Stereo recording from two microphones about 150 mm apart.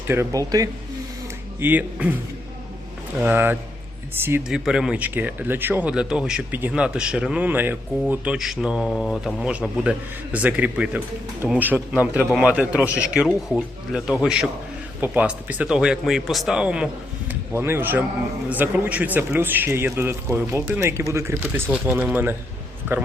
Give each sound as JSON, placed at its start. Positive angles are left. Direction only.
{"t": 0.1, "sound": "speech", "side_deg": -20}
{"t": 1.5, "sound": "speech", "side_deg": -10}
{"t": 3.2, "sound": "a man's voice", "side_deg": -15}